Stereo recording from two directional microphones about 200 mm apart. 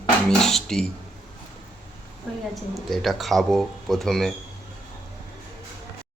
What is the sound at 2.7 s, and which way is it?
Speech, centre (ahead or behind).